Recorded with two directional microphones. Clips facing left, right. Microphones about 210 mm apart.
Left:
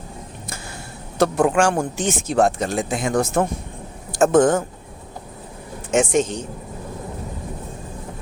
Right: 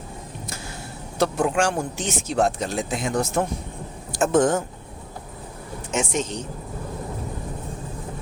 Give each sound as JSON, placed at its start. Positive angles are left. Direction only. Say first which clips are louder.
{"t": 1.2, "sound": "speech", "louder": "left 4 dB", "side_deg": 50}
{"t": 5.9, "sound": "speech", "louder": "left 7 dB", "side_deg": 50}